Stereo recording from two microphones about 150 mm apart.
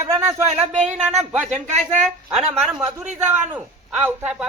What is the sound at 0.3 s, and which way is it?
Speech, 45° right (ahead or behind).